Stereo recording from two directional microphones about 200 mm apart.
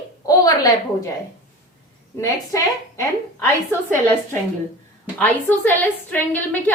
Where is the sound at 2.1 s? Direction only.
15° left (ahead or behind).